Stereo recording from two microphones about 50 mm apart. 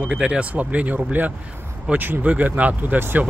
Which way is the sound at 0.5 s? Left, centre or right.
Right.